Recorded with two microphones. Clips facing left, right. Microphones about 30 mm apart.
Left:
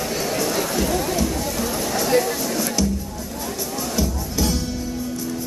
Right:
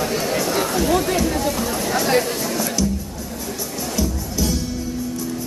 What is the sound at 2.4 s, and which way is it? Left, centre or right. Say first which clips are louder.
Music: right 1 dB; centre.